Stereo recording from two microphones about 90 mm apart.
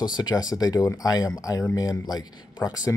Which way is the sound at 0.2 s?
45° left (ahead or behind).